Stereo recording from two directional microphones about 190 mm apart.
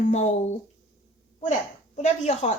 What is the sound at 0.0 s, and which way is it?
Speech, 40° left (ahead or behind).